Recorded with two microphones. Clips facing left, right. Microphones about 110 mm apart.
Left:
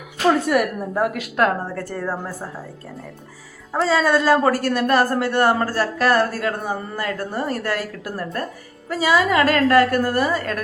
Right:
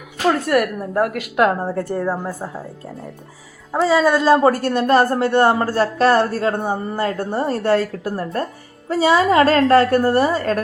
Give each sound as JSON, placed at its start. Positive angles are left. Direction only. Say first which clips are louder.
{"t": 0.3, "sound": "speech", "louder": "right 1 dB", "side_deg": 0}
{"t": 1.6, "sound": "a man's voice", "louder": "right 5 dB", "side_deg": -25}
{"t": 3.7, "sound": "a man's voice", "louder": "right 3 dB", "side_deg": -15}